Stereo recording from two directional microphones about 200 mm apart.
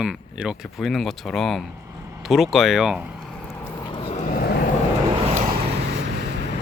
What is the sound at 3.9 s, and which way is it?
Vehicle, 25° left (ahead or behind).